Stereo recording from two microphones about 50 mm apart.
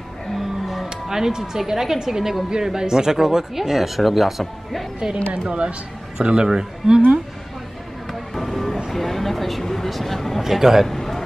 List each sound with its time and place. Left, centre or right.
0.4 s music: centre
0.8 s speech: centre
5.5 s speech: right
8.1 s music: centre
8.9 s speech: centre
10.4 s speech: centre
10.9 s a man's voice: centre